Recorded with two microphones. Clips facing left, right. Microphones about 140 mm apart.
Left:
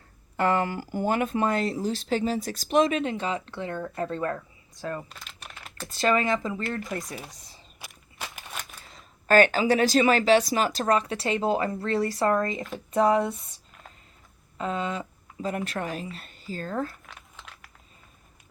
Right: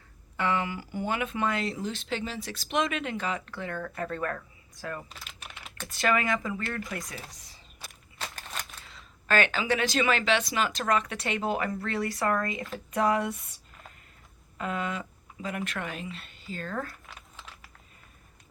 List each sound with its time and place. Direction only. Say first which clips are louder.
0.3 s speech: left 5 dB; 45° left (ahead or behind); by 5.0 s 20° left (ahead or behind)
5.0 s typing: left 1 dB; centre (ahead or behind)
5.9 s speech: left 3 dB; 25° left (ahead or behind)
7.9 s a sound: even; 10° left (ahead or behind)
8.8 s speech: left 1 dB; 45° left (ahead or behind); by 13.3 s 25° left (ahead or behind)
14.6 s speech: left 3 dB; 25° left (ahead or behind)
17.1 s crumpling: left 1 dB; centre (ahead or behind)